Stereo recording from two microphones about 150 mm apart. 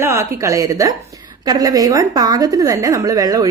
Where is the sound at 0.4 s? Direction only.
20° right (ahead or behind).